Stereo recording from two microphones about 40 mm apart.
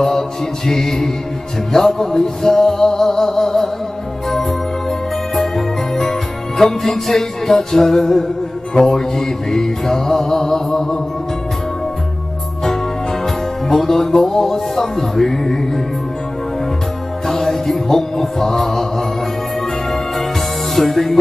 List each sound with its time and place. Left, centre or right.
0.7 s music: centre
5.3 s jingle bell: centre
7.5 s music: centre
12.6 s music: centre
17.3 s music: centre